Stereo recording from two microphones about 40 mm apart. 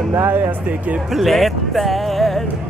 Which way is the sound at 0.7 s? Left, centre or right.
Right.